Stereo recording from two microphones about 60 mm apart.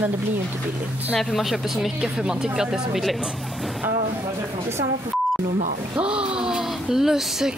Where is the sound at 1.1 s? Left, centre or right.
Centre.